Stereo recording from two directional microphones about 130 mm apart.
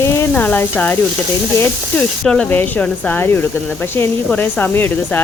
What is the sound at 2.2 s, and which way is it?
Speech, 5° left (ahead or behind).